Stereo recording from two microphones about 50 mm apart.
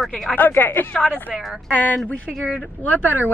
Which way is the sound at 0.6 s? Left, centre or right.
Left.